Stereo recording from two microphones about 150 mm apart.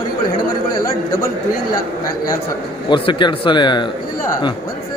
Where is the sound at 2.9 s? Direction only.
30° left (ahead or behind).